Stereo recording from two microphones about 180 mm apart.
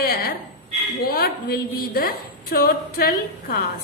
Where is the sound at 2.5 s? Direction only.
55° left (ahead or behind).